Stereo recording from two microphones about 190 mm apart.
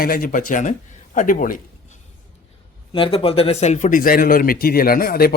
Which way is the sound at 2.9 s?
25° left (ahead or behind).